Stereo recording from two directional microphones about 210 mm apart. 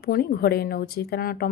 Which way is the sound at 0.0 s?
45° left (ahead or behind).